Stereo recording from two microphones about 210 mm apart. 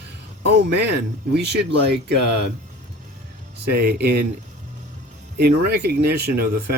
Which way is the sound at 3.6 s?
50° right (ahead or behind).